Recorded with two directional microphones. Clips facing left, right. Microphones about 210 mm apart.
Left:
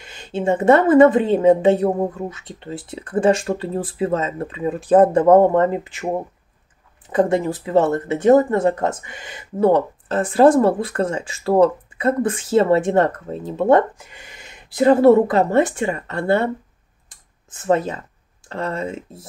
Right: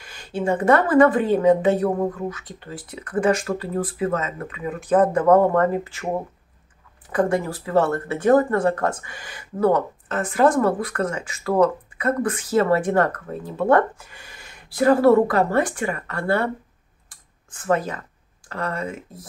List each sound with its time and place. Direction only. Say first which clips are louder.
0.0 s speech: left 3 dB; 25° left (ahead or behind)
7.1 s speech: left 3 dB; 20° left (ahead or behind)
17.1 s a sound: left 1 dB; 25° left (ahead or behind)
18.5 s speech: left 3 dB; 25° left (ahead or behind)